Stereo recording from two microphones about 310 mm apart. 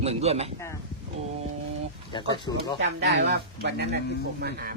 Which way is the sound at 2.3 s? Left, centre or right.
Centre.